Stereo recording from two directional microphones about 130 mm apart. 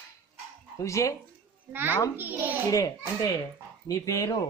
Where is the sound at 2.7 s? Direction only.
25° left (ahead or behind).